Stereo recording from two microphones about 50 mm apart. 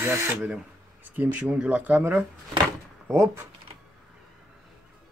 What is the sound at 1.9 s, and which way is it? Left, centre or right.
Speech, right.